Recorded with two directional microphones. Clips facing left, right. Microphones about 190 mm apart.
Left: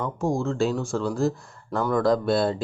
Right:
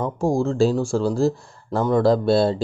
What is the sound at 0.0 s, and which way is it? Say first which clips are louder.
Speech: right 4 dB; 30° right (ahead or behind).